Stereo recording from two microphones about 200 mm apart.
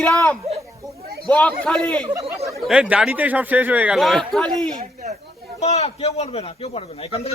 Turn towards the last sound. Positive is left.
turn(degrees=30)  # may be behind; listen again after turning